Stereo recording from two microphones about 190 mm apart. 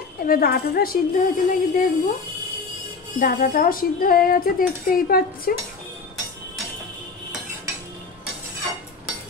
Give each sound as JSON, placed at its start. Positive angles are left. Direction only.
{"t": 0.3, "sound": "speech", "side_deg": 50}
{"t": 3.2, "sound": "speech", "side_deg": 50}